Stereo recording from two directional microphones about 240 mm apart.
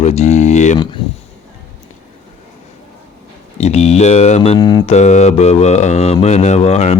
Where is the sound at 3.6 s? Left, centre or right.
Left.